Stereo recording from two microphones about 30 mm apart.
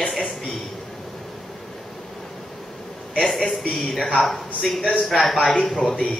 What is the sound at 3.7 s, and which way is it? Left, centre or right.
A man's voice, centre.